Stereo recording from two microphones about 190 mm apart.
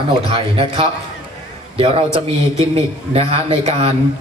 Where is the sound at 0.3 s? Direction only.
30° right (ahead or behind).